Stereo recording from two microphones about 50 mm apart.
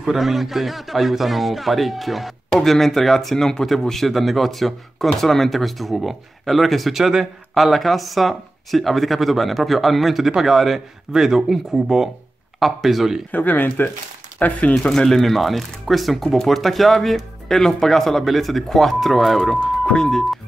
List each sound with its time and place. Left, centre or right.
0.0 s speech: centre
13.3 s speech: left
14.9 s speech: centre
19.5 s speech: centre